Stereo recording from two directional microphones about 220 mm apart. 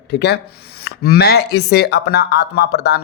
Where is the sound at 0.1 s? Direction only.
50° left (ahead or behind).